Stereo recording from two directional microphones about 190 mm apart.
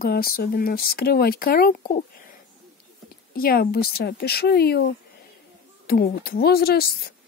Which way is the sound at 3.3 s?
50° left (ahead or behind).